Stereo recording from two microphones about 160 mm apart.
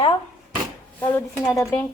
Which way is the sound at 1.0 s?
15° left (ahead or behind).